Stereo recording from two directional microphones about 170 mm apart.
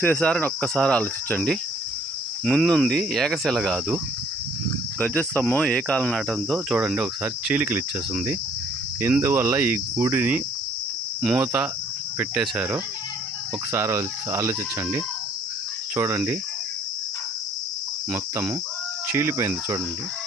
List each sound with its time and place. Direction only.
0.0 s cricket: 10° left (ahead or behind); by 16.4 s 15° right (ahead or behind)
18.1 s cricket: 10° right (ahead or behind)